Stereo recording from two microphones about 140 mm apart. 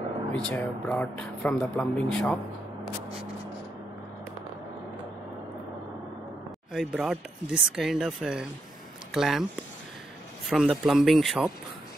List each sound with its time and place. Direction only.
0.5 s speech: 10° left (ahead or behind)
6.7 s speech: centre (ahead or behind)
10.5 s speech: 5° right (ahead or behind)